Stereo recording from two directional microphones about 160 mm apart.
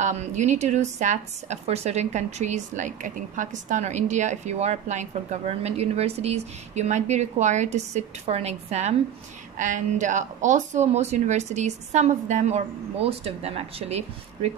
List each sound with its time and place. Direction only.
0.0 s speech: 50° right (ahead or behind)